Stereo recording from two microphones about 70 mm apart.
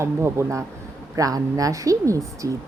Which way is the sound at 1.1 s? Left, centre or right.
Right.